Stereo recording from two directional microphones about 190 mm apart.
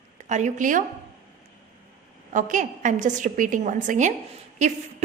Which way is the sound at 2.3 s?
40° right (ahead or behind).